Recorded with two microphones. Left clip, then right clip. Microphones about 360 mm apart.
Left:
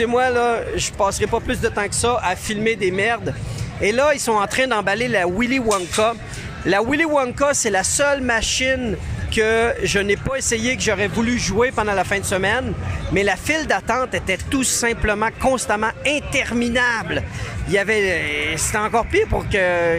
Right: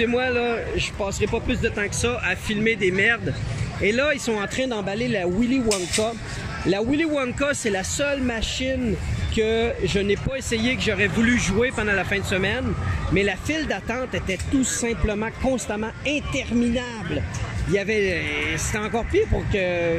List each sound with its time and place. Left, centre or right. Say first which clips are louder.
0.0 s speech: left 5 dB; centre
5.7 s speech: left 5 dB; left
6.7 s speech: left 5 dB; centre